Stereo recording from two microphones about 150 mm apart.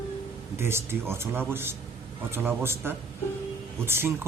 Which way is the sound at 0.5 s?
15° right (ahead or behind).